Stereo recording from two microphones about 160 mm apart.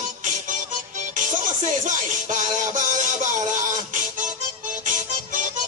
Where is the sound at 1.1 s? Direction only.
55° right (ahead or behind).